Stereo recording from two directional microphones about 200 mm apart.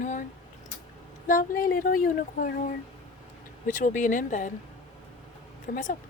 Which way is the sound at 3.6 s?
40° left (ahead or behind).